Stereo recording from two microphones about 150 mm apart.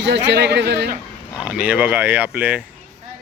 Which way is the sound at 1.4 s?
10° right (ahead or behind).